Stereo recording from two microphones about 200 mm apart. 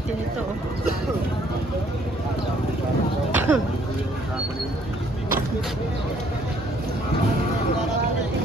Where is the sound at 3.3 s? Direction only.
10° right (ahead or behind).